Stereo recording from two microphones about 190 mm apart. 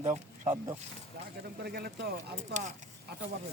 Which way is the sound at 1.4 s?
55° right (ahead or behind).